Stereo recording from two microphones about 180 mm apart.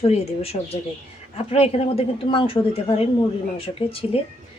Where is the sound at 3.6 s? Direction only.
30° left (ahead or behind).